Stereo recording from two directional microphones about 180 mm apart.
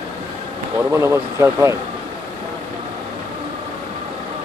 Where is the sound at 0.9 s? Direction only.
15° right (ahead or behind).